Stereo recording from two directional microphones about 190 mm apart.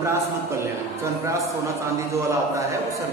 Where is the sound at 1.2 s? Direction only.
15° right (ahead or behind).